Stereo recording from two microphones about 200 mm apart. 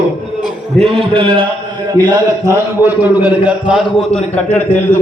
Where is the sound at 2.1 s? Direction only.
10° right (ahead or behind).